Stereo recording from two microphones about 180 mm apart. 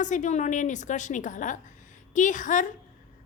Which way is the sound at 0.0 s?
45° left (ahead or behind).